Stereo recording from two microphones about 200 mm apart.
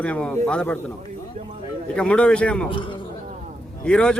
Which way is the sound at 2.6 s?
25° left (ahead or behind).